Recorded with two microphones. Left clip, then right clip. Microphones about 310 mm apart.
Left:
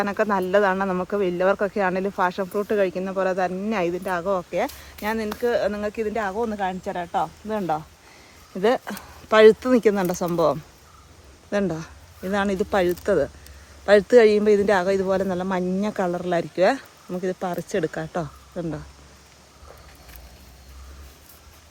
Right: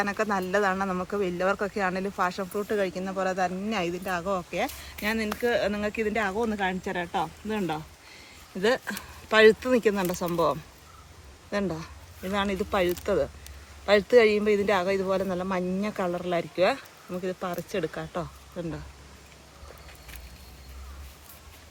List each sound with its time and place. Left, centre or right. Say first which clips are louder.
0.0 s speech: left 5 dB; left
8.6 s speech: left 4 dB; left